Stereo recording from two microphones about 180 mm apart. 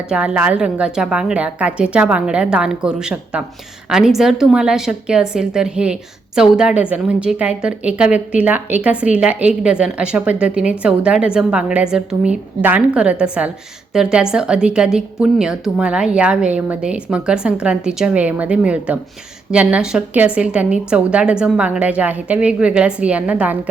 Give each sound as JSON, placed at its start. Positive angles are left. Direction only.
{"t": 0.1, "sound": "a woman's voice", "side_deg": -5}